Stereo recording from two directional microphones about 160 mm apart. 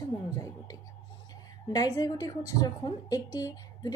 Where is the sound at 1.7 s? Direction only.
25° left (ahead or behind).